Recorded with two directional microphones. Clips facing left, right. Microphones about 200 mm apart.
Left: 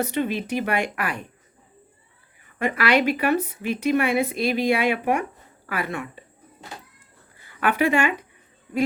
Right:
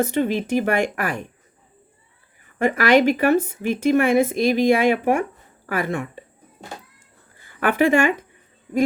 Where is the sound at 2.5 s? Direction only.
45° right (ahead or behind).